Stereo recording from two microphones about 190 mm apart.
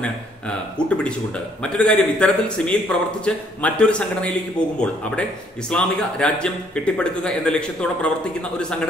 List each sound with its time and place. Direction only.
0.0 s a man's voice: 5° left (ahead or behind)